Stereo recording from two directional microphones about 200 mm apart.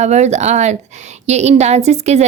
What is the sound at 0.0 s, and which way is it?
Speech, 35° right (ahead or behind).